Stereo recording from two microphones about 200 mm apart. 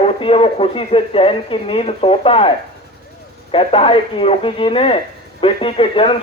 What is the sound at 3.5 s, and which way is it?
Speech, 30° left (ahead or behind).